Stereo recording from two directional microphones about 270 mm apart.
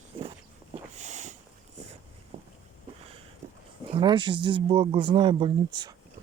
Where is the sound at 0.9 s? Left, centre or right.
Right.